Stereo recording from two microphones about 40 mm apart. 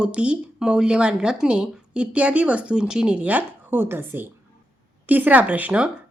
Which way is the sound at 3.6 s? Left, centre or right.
Right.